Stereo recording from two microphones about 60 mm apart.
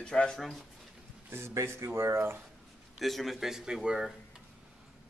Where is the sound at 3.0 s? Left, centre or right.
Centre.